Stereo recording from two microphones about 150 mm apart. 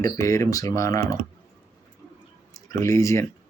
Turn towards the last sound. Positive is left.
turn(degrees=20)  # may be behind; listen again after turning